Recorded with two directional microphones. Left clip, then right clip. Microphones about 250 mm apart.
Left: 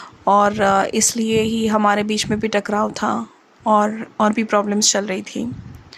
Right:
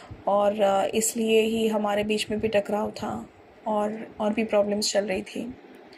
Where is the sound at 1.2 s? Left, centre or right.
Left.